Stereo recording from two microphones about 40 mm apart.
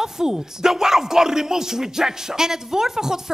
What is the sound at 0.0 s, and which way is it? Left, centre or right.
Speech, centre.